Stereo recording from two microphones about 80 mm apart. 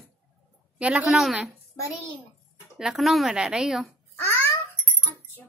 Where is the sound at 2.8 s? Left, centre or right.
Centre.